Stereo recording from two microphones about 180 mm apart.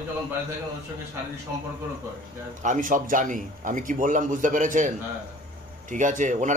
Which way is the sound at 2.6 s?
45° right (ahead or behind).